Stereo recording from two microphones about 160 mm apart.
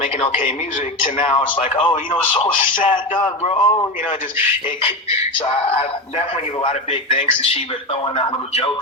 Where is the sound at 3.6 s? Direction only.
30° left (ahead or behind).